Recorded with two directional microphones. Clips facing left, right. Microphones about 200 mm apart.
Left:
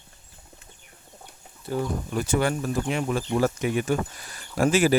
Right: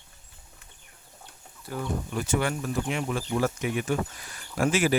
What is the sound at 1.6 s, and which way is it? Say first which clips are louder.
Speech: left 4 dB; 35° left (ahead or behind).